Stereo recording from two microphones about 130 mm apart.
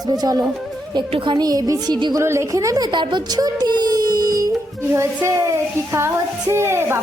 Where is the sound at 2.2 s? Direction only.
20° right (ahead or behind).